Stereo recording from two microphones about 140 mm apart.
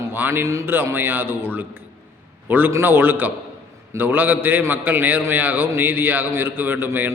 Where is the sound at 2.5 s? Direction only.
15° right (ahead or behind).